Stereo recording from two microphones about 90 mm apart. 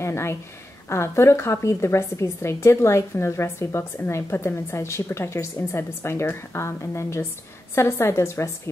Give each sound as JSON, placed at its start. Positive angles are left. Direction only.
{"t": 0.0, "sound": "a woman's voice", "side_deg": 30}